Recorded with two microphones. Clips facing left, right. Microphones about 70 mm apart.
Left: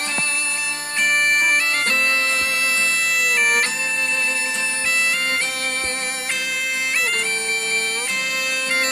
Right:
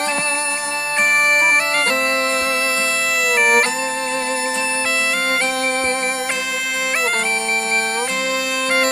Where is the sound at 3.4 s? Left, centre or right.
Right.